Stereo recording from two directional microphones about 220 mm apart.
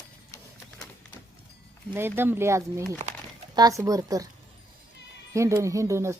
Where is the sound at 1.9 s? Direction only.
10° right (ahead or behind).